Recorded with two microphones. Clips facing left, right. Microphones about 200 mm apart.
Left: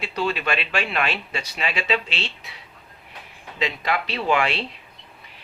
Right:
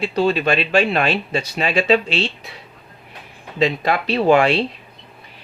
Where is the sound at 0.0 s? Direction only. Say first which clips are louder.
Right 8 dB; 35° right (ahead or behind).